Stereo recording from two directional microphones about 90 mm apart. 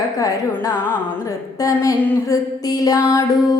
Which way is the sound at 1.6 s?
40° left (ahead or behind).